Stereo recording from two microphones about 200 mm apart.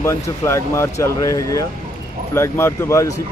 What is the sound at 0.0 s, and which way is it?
Speech, 15° left (ahead or behind).